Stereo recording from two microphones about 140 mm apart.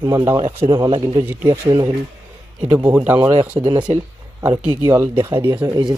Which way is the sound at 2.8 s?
10° right (ahead or behind).